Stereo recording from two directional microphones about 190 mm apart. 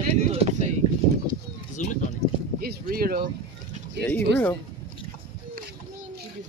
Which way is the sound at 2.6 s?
50° right (ahead or behind).